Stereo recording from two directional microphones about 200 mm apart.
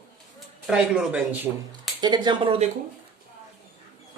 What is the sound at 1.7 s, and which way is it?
Speech, 20° right (ahead or behind).